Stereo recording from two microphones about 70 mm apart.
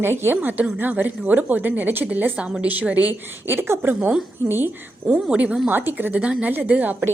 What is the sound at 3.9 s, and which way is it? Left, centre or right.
Speech, centre.